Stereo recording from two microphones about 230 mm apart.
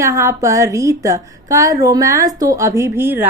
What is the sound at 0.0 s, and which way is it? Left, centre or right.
A woman's voice, centre.